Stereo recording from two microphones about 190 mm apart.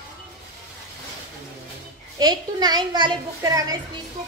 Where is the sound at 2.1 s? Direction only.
20° right (ahead or behind).